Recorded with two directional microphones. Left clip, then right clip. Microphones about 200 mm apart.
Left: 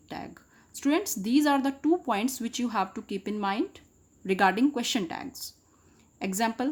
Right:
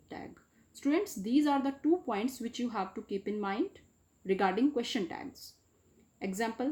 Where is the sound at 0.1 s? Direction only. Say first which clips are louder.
Left 6 dB; 40° left (ahead or behind).